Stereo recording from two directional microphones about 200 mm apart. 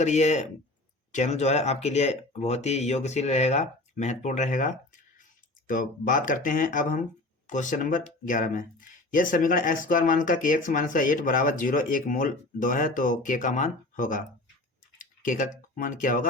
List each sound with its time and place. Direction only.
0.0 s speech: 35° left (ahead or behind)